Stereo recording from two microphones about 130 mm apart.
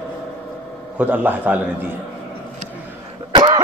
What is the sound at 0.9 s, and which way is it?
Speech, 15° right (ahead or behind).